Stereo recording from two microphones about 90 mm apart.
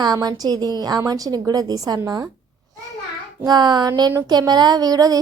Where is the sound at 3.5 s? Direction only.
50° right (ahead or behind).